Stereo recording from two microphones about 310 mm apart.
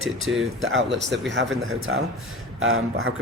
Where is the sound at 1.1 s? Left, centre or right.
Right.